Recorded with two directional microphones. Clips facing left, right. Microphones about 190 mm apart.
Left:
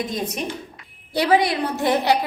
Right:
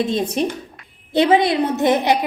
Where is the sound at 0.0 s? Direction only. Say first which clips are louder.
Right 7 dB; 25° right (ahead or behind).